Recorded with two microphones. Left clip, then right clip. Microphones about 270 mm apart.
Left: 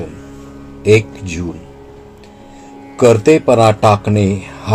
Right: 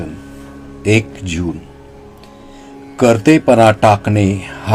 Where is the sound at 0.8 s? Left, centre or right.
Right.